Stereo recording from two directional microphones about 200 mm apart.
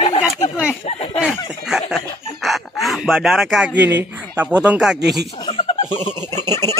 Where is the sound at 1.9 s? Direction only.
Centre (ahead or behind).